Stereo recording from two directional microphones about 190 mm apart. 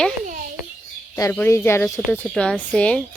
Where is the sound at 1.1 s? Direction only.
10° left (ahead or behind).